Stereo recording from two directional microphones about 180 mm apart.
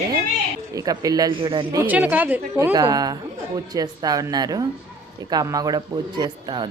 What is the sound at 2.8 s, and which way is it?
Speech, 20° right (ahead or behind).